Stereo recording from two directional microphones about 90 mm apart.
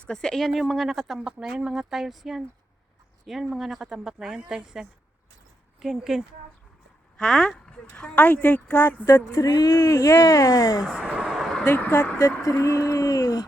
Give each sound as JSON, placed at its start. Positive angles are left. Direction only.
{"t": 0.1, "sound": "speech", "side_deg": 5}
{"t": 9.3, "sound": "speech", "side_deg": 45}
{"t": 10.9, "sound": "a sound", "side_deg": -15}
{"t": 11.6, "sound": "speech", "side_deg": 25}
{"t": 12.2, "sound": "speech", "side_deg": 35}